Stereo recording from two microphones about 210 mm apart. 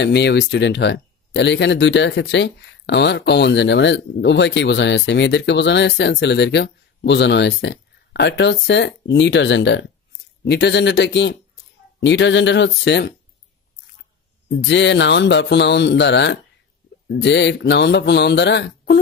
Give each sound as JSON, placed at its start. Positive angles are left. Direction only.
{"t": 0.0, "sound": "speech", "side_deg": 55}
{"t": 14.5, "sound": "speech", "side_deg": 55}